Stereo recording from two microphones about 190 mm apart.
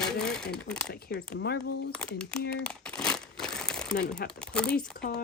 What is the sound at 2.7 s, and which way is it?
Crumpling, 5° left (ahead or behind).